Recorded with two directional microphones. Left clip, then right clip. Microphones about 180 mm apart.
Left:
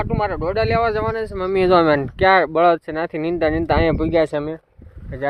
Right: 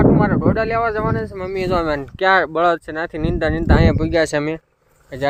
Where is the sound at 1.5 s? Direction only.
55° left (ahead or behind).